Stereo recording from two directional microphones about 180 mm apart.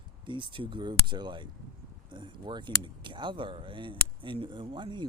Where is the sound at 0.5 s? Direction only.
25° right (ahead or behind).